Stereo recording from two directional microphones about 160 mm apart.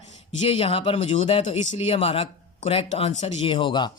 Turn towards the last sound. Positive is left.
turn(degrees=30)  # may be behind; listen again after turning